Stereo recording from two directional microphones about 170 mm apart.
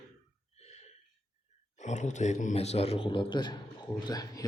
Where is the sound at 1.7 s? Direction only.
45° left (ahead or behind).